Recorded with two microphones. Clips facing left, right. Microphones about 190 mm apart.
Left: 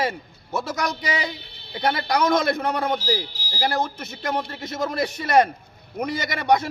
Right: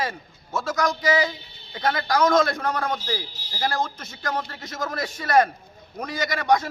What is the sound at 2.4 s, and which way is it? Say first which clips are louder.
Speech: left 1 dB; 20° left (ahead or behind).